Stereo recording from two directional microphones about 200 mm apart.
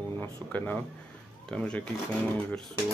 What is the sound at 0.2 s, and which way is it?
Speech, 10° left (ahead or behind).